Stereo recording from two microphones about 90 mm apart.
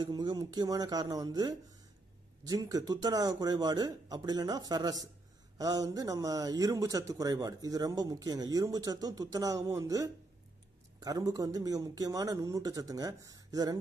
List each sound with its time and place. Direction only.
0.0 s speech: 55° right (ahead or behind)